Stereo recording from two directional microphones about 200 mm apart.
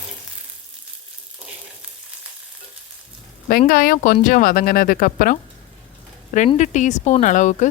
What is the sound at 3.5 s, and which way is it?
Speech, 45° left (ahead or behind).